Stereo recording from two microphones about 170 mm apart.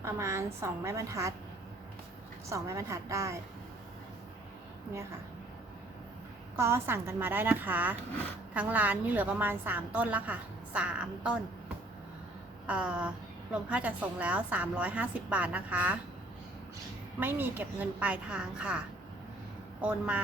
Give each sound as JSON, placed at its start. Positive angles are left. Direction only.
{"t": 0.0, "sound": "a woman's voice", "side_deg": -15}
{"t": 2.5, "sound": "a woman's voice", "side_deg": -15}
{"t": 6.6, "sound": "a woman's voice", "side_deg": -15}
{"t": 12.6, "sound": "a woman's voice", "side_deg": -5}
{"t": 17.2, "sound": "a woman's voice", "side_deg": -10}
{"t": 19.8, "sound": "a woman's voice", "side_deg": -5}